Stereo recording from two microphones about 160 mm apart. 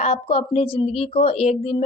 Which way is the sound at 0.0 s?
40° left (ahead or behind).